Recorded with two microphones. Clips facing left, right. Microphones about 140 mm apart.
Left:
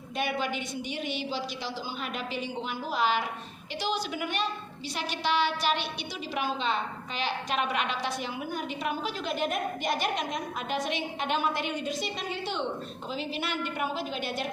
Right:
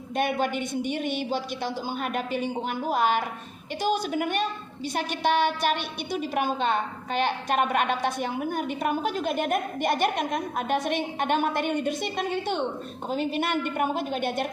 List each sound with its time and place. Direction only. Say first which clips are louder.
0.2 s a woman's voice: right 5 dB; 50° right (ahead or behind)